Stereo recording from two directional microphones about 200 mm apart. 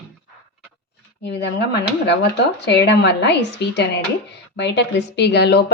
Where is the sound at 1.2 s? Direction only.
60° left (ahead or behind).